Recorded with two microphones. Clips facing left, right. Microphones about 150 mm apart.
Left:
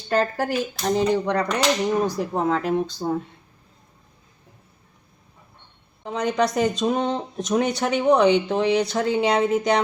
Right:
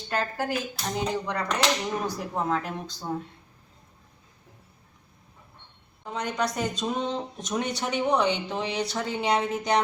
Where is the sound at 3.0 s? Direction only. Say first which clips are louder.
Left 7 dB; 40° left (ahead or behind).